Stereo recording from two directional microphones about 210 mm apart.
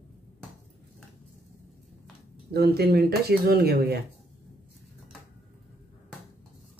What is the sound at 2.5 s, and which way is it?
Speech, 50° right (ahead or behind).